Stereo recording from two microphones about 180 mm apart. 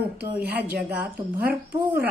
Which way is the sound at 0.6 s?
55° right (ahead or behind).